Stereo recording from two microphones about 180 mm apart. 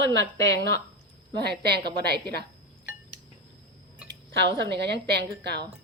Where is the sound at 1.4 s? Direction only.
65° right (ahead or behind).